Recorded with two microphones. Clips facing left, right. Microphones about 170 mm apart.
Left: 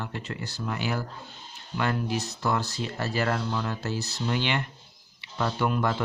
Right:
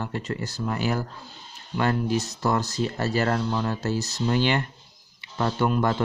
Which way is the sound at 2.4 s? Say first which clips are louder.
Right 3 dB; 40° right (ahead or behind).